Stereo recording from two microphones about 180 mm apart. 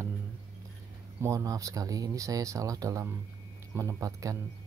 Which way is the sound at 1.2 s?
20° right (ahead or behind).